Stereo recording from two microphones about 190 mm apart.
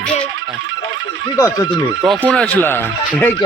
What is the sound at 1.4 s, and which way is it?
Speech, 20° left (ahead or behind).